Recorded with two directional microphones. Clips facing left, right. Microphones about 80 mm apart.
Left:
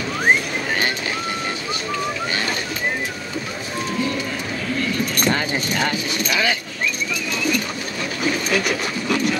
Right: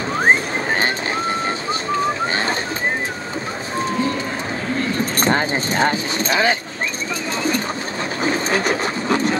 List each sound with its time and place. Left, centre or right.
0.1 s vehicle: right
3.7 s run: right
4.7 s keys jangling: right
7.3 s bird: right
8.2 s a sound: right